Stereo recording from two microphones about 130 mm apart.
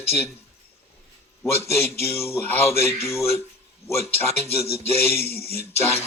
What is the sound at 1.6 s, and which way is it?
A man's voice, 20° left (ahead or behind).